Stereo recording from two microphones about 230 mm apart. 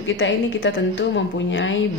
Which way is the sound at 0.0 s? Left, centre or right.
Left.